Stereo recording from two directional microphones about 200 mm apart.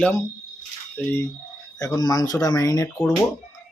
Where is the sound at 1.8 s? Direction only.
20° left (ahead or behind).